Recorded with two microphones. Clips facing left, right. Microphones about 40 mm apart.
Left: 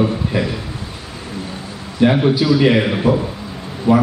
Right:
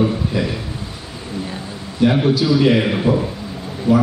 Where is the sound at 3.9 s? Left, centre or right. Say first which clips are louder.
Left 1 dB; centre.